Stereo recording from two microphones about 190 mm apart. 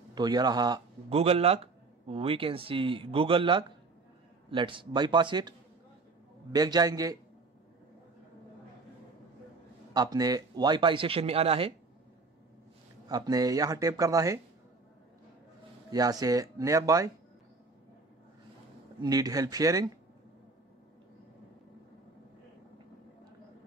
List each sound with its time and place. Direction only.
0.1 s speech: 20° right (ahead or behind)
1.1 s speech: 30° right (ahead or behind)
6.5 s speech: 20° right (ahead or behind)
9.9 s speech: 20° right (ahead or behind)
13.1 s speech: 20° right (ahead or behind)
15.9 s speech: 20° right (ahead or behind)
19.0 s speech: 20° right (ahead or behind)